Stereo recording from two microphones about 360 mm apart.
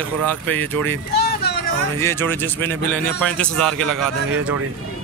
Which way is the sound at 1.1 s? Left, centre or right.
Left.